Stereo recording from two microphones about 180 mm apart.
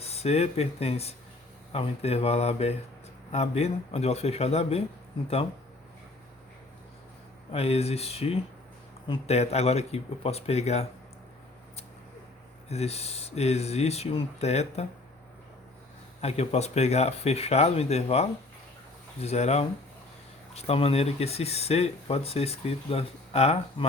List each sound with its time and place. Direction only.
0.0 s speech: 35° left (ahead or behind)
7.5 s speech: 35° left (ahead or behind)
12.6 s speech: 35° left (ahead or behind)
16.2 s speech: 35° left (ahead or behind)